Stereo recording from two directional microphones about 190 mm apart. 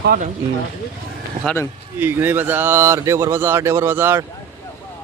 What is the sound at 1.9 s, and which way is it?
Speech, 10° right (ahead or behind).